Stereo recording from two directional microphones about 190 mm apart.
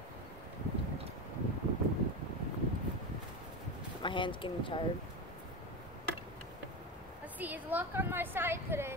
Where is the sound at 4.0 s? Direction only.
25° left (ahead or behind).